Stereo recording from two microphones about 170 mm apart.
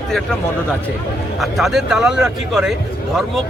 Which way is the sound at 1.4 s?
Centre (ahead or behind).